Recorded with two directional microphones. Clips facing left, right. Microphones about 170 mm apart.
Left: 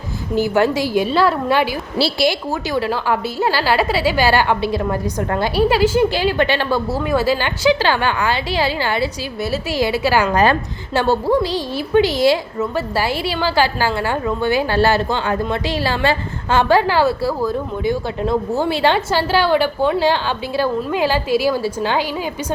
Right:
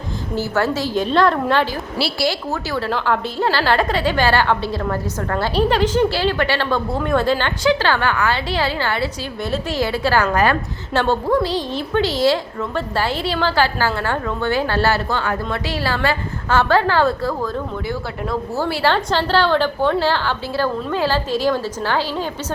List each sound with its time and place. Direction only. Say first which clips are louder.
0.3 s a woman's voice: left 4 dB; 15° left (ahead or behind)
2.0 s a woman's voice: left 5 dB; 25° left (ahead or behind)
2.2 s a woman's voice: left 3 dB; 15° left (ahead or behind)
18.2 s a woman's voice: left 2 dB; 20° left (ahead or behind)